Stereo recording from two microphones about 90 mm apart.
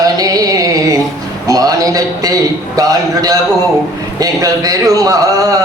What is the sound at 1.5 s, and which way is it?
A man's voice, 40° right (ahead or behind).